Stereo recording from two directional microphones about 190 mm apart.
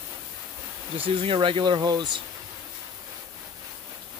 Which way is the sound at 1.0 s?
30° right (ahead or behind).